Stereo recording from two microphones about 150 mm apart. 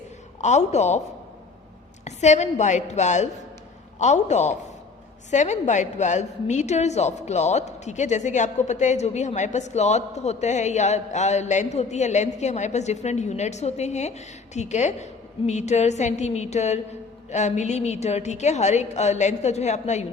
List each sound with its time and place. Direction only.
0.4 s a woman's voice: 50° left (ahead or behind)
2.0 s a woman's voice: 50° left (ahead or behind)